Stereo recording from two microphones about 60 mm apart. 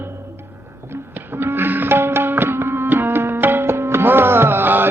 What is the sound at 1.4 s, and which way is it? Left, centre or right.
Music, right.